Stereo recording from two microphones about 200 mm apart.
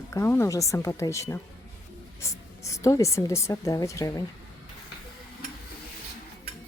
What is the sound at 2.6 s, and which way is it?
Speech, 15° left (ahead or behind).